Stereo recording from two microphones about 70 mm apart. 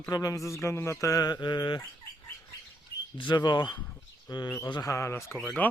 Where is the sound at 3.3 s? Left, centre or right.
Left.